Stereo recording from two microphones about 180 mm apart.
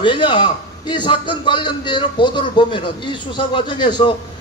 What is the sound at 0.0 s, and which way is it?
A man's voice, 25° left (ahead or behind).